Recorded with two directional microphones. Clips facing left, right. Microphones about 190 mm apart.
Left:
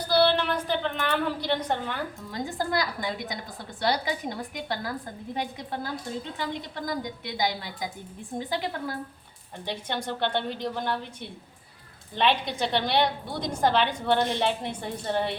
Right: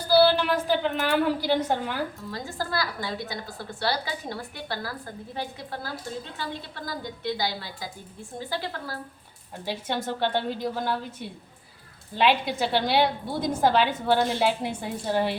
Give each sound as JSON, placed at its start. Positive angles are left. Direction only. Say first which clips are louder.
{"t": 0.1, "sound": "a woman's voice", "louder": "right 3 dB", "side_deg": -5}
{"t": 2.3, "sound": "a woman's voice", "louder": "left 7 dB", "side_deg": 20}
{"t": 9.6, "sound": "a woman's voice", "louder": "right 2 dB", "side_deg": -5}
{"t": 12.1, "sound": "a woman's voice", "louder": "right 2 dB", "side_deg": -5}